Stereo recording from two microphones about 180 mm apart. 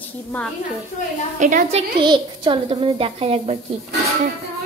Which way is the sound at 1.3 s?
45° right (ahead or behind).